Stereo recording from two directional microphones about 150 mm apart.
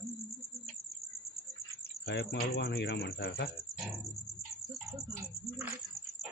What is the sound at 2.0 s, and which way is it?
Speech, 90° left.